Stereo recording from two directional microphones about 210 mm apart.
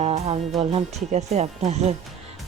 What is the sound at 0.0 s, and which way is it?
Music, 30° right (ahead or behind).